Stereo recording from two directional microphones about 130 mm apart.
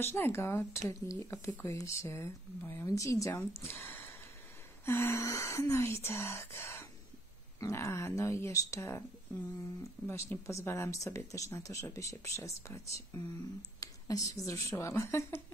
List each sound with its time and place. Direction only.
0.0 s speech: 20° left (ahead or behind)
10.0 s speech: 20° left (ahead or behind)